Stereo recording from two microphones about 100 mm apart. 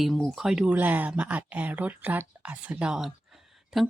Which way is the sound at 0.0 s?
Centre (ahead or behind).